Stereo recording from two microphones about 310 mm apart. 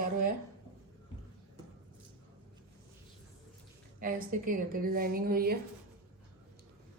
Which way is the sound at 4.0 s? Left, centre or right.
Right.